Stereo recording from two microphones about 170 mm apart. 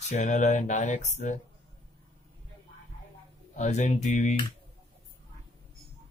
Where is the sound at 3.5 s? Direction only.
45° left (ahead or behind).